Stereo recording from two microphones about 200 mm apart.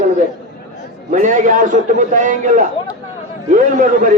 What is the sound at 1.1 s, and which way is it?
A man's voice, 40° right (ahead or behind).